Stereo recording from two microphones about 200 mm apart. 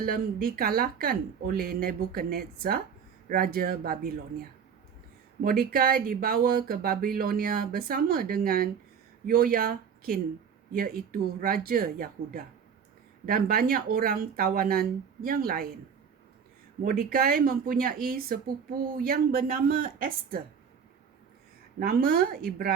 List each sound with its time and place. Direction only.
0.0 s speech: 45° right (ahead or behind)
16.8 s speech: 50° right (ahead or behind)
21.8 s speech: 50° right (ahead or behind)